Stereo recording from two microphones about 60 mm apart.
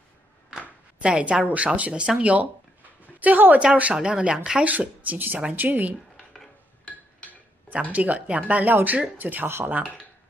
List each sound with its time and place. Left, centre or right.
1.0 s a woman's voice: centre
6.3 s dishes: centre
7.9 s speech: right